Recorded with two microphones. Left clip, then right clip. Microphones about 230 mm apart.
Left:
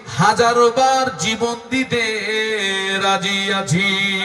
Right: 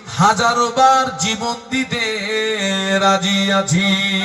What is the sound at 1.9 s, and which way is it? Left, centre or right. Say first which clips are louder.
Mantra: left 1 dB; left.